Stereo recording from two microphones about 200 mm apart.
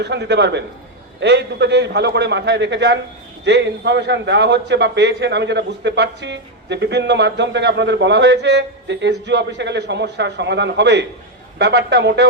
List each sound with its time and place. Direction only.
0.0 s a man's voice: 60° right (ahead or behind)